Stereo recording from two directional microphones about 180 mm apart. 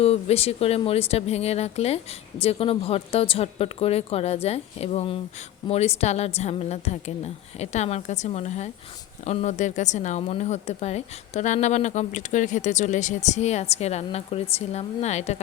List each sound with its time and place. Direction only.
0.0 s a woman's voice: 35° left (ahead or behind)